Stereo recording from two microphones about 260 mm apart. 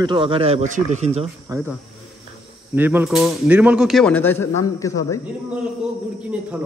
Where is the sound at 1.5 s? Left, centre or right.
Centre.